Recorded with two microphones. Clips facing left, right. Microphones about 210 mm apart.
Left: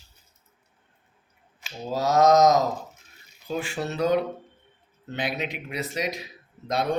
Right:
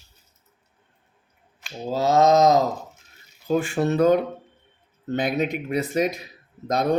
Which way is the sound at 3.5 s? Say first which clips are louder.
Right 8 dB; 50° right (ahead or behind).